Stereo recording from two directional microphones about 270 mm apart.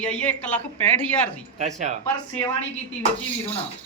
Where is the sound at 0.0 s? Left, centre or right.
Centre.